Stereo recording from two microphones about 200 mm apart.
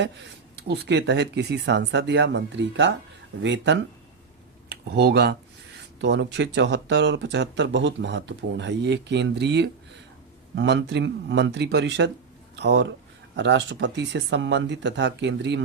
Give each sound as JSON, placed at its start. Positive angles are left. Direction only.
{"t": 0.5, "sound": "speech", "side_deg": -55}